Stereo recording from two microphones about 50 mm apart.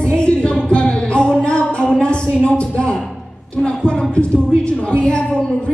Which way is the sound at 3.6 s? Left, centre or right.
Centre.